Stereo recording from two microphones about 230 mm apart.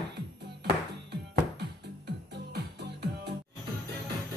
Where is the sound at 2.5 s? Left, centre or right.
Right.